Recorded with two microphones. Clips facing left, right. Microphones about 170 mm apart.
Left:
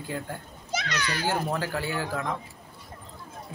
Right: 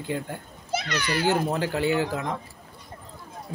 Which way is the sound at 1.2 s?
20° right (ahead or behind).